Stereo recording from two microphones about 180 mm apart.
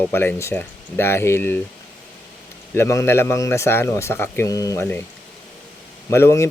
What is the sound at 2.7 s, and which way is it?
Speech, 15° left (ahead or behind).